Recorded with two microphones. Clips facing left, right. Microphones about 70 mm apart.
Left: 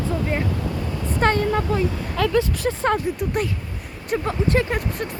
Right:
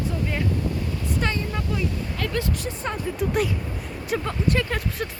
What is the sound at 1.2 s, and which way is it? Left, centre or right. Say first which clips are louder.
Speech: left 10 dB; left.